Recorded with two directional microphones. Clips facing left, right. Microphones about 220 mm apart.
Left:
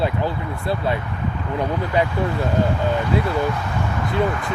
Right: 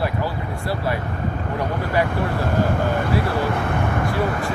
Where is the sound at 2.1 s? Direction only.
55° right (ahead or behind).